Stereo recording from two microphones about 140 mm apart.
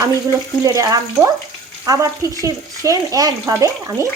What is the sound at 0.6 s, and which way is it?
Speech, 25° right (ahead or behind).